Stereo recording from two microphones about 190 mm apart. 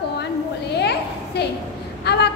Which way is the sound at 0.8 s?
60° left (ahead or behind).